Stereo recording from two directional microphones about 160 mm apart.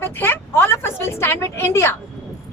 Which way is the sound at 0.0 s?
15° left (ahead or behind).